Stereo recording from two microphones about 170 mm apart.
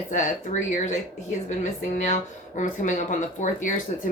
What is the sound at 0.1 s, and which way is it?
Speech, 45° left (ahead or behind).